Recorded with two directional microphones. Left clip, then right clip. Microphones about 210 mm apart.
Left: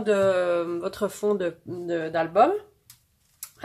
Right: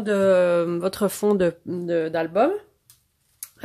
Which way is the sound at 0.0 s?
45° right (ahead or behind).